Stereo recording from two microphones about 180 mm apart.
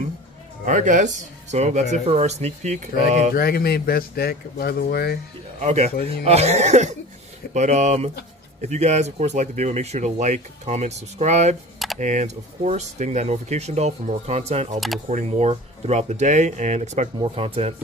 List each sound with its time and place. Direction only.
0.7 s speech: 45° right (ahead or behind)
3.3 s speech: 60° left (ahead or behind)
5.6 s speech: 40° right (ahead or behind)